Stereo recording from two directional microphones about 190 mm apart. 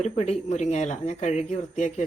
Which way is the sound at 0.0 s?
35° left (ahead or behind).